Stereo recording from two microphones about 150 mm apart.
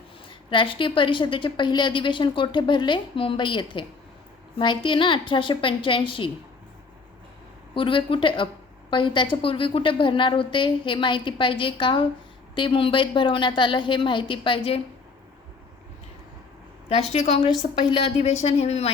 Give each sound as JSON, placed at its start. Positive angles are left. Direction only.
{"t": 0.3, "sound": "a woman's voice", "side_deg": 35}
{"t": 7.7, "sound": "a woman's voice", "side_deg": 35}
{"t": 16.9, "sound": "speech", "side_deg": 45}